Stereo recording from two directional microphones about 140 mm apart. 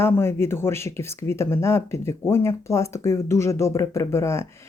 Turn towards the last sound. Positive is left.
turn(degrees=20)  # may be behind; listen again after turning